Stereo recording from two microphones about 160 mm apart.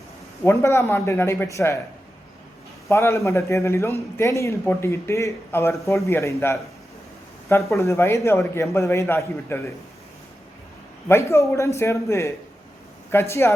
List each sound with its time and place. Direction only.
0.4 s a man's voice: 15° left (ahead or behind)
2.9 s a man's voice: 15° left (ahead or behind)
7.8 s a man's voice: 15° left (ahead or behind)
11.1 s a man's voice: 15° left (ahead or behind)